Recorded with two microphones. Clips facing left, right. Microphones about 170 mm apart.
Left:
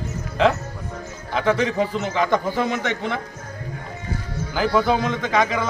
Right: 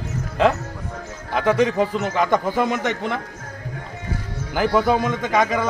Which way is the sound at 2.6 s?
45° right (ahead or behind).